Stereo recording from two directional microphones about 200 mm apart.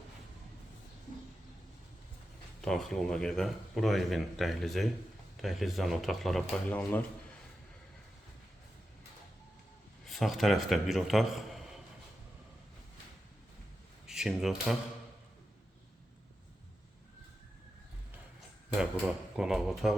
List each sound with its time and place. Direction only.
2.6 s speech: centre (ahead or behind)
10.1 s a man's voice: centre (ahead or behind)
14.1 s speech: 5° right (ahead or behind)
18.8 s speech: 5° right (ahead or behind)